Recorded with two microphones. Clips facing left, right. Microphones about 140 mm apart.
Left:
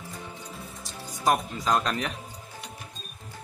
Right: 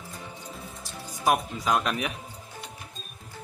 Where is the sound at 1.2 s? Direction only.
5° right (ahead or behind).